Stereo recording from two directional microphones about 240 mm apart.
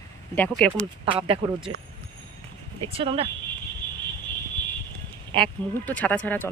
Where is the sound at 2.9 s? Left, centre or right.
Right.